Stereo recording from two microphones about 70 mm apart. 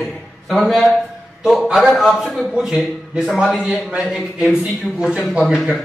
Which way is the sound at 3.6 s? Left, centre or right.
Centre.